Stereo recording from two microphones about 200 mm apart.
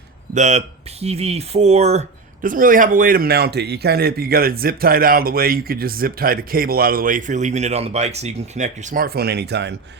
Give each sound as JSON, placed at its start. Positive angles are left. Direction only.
{"t": 0.3, "sound": "speech", "side_deg": -35}